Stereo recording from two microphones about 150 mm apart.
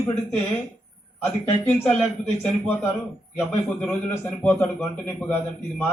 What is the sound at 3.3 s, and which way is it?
A man's voice, 10° left (ahead or behind).